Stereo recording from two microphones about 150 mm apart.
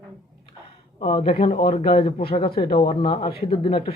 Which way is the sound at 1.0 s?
35° left (ahead or behind).